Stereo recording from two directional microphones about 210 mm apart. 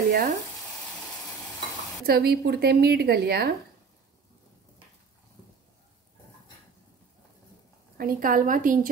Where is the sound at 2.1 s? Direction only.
50° right (ahead or behind).